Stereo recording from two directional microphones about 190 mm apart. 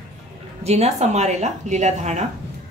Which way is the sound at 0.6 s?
35° right (ahead or behind).